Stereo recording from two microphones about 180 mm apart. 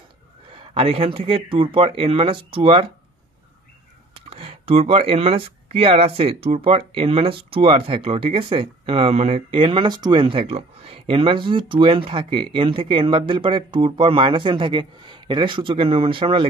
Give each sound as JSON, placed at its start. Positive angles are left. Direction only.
{"t": 0.6, "sound": "speech", "side_deg": -30}
{"t": 4.3, "sound": "speech", "side_deg": -30}